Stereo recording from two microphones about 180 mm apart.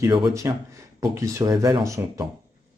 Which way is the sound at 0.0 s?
20° right (ahead or behind).